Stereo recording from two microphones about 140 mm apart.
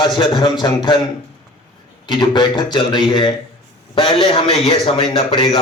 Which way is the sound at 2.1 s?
30° left (ahead or behind).